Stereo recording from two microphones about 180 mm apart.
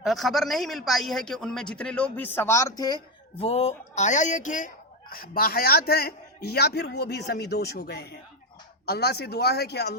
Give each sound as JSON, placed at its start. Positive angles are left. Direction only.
{"t": 0.0, "sound": "a man's voice", "side_deg": 0}
{"t": 3.4, "sound": "speech", "side_deg": 35}